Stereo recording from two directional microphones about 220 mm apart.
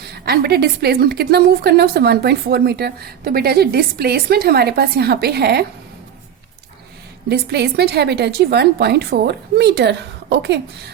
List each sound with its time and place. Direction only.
0.1 s a woman's voice: 45° right (ahead or behind)
7.3 s a woman's voice: 50° right (ahead or behind)